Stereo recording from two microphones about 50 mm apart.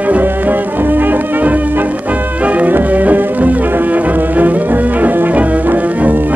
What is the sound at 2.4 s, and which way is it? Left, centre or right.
Music, right.